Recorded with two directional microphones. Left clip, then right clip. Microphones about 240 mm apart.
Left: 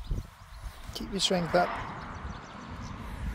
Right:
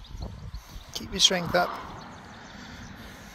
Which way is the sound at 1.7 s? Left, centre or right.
Right.